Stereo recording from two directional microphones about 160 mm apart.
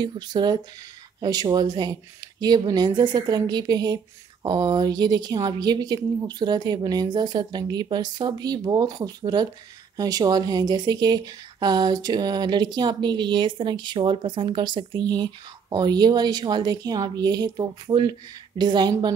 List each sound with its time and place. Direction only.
0.0 s a woman's voice: 25° right (ahead or behind)